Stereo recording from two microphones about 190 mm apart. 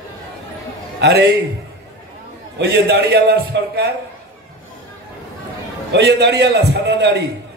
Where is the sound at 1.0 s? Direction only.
60° right (ahead or behind).